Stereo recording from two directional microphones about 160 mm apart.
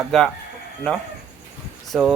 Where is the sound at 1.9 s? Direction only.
Centre (ahead or behind).